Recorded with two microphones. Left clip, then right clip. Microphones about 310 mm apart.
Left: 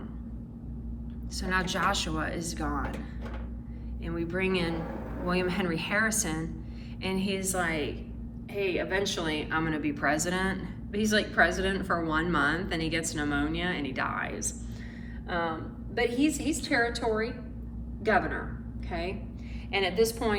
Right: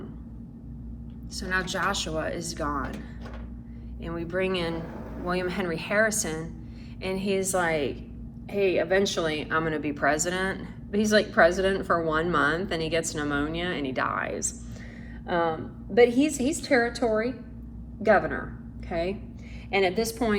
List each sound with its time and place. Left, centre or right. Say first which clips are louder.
1.4 s speech: right 1 dB; centre
4.0 s speech: right 2 dB; centre
16.0 s a woman's voice: right 7 dB; centre